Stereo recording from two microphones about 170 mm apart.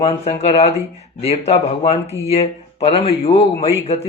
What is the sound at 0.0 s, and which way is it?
Speech, 40° left (ahead or behind).